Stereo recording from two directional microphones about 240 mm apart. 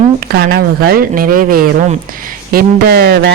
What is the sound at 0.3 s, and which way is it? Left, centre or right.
A man's voice, right.